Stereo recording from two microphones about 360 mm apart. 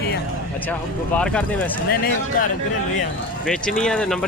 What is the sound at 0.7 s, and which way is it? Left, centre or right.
Speech, centre.